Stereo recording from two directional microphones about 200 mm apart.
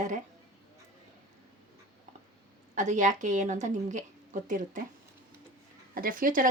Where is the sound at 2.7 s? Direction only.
40° right (ahead or behind).